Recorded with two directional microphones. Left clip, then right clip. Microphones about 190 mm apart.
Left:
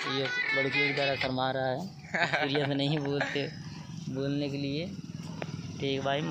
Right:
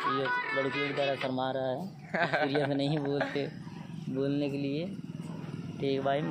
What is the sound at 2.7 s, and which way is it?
Speech, 15° left (ahead or behind).